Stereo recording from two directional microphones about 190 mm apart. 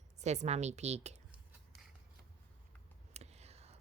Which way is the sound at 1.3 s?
5° right (ahead or behind).